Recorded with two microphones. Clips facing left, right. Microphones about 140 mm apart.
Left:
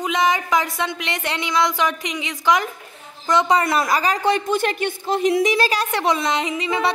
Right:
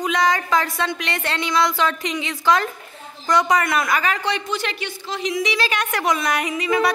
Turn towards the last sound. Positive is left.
turn(degrees=25)  # may be behind; listen again after turning